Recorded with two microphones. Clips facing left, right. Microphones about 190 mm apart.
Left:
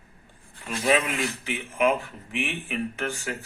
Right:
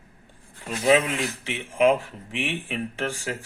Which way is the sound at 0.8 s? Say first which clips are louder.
Right 3 dB; 30° right (ahead or behind).